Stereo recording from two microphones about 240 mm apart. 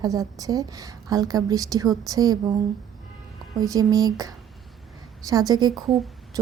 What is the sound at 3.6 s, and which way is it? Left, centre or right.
Speech, centre.